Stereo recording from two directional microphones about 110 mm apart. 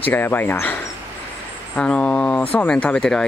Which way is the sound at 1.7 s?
10° left (ahead or behind).